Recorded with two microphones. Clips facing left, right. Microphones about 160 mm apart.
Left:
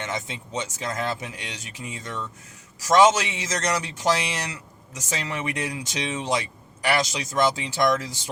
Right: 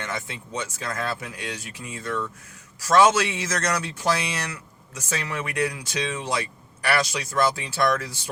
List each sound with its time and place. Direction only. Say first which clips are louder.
0.0 s speech: left 1 dB; 20° left (ahead or behind)